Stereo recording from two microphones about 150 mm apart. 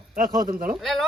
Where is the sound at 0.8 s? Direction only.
5° left (ahead or behind).